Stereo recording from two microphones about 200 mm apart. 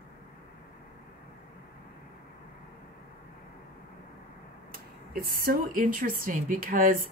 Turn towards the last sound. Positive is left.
turn(degrees=-45)  # may be behind; listen again after turning